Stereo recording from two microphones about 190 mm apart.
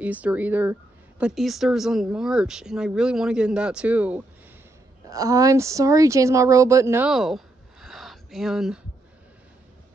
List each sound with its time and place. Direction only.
0.0 s speech: 5° right (ahead or behind)
5.1 s speech: 20° right (ahead or behind)
7.1 s a sound: centre (ahead or behind)